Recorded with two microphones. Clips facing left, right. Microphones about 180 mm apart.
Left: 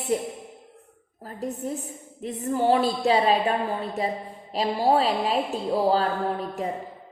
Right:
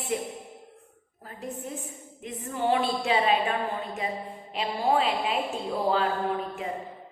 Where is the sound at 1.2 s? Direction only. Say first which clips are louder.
Left 6 dB; 40° left (ahead or behind).